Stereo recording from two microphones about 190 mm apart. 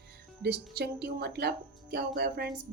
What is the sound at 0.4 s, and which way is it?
Speech, 60° right (ahead or behind).